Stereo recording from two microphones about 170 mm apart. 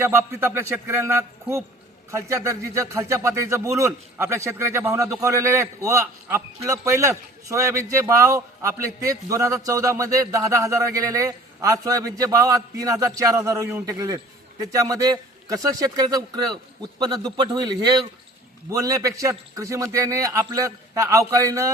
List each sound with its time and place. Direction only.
0.0 s a man's voice: 15° right (ahead or behind)